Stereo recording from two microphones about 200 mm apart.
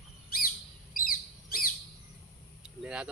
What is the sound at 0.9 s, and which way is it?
Bird, 45° left (ahead or behind).